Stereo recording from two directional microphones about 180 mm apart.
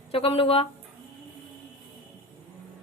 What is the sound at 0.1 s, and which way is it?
Speech, 30° left (ahead or behind).